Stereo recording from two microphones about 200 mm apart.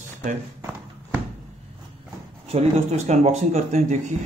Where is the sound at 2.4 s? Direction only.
30° right (ahead or behind).